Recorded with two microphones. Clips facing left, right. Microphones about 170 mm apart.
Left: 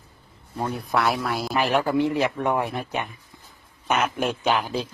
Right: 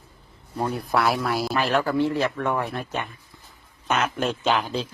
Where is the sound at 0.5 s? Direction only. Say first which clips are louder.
Right 1 dB; centre (ahead or behind).